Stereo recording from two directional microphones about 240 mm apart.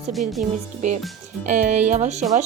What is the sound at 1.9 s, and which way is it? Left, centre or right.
Speech, right.